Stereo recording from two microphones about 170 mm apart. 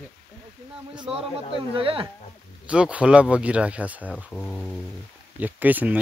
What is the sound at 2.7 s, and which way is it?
Speech, 5° right (ahead or behind).